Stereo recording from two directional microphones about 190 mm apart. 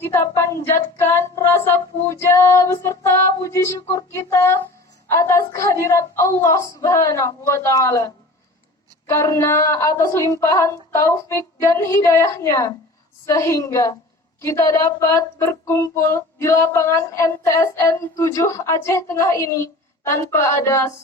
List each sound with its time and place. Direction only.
0.0 s speech: 15° left (ahead or behind)